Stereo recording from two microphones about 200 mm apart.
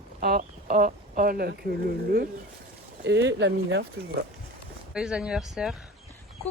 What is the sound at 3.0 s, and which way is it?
Speech, 60° right (ahead or behind).